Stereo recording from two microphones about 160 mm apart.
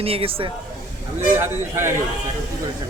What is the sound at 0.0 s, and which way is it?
Speech, 35° right (ahead or behind).